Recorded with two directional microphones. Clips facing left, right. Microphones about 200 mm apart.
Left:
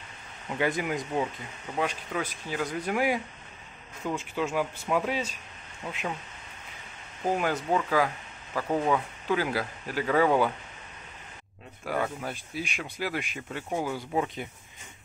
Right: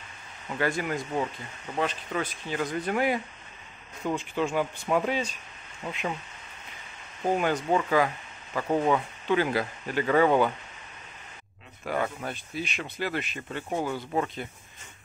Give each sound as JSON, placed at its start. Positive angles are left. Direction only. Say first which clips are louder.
{"t": 0.5, "sound": "speech", "louder": "even", "side_deg": 15}
{"t": 7.2, "sound": "speech", "louder": "right 2 dB", "side_deg": 5}
{"t": 11.8, "sound": "speech", "louder": "right 1 dB", "side_deg": 5}